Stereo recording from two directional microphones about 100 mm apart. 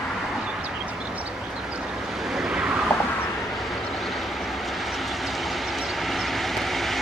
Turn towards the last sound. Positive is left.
turn(degrees=0)  # may be behind; listen again after turning